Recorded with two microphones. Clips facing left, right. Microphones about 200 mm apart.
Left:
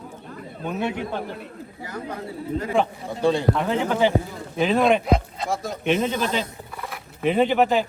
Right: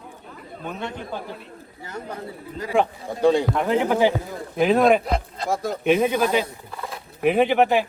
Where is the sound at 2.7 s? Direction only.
15° right (ahead or behind).